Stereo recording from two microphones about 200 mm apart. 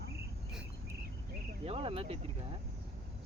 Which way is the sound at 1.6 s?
25° right (ahead or behind).